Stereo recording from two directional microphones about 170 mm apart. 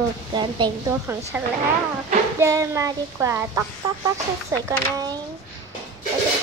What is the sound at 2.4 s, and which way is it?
A woman's voice, 20° right (ahead or behind).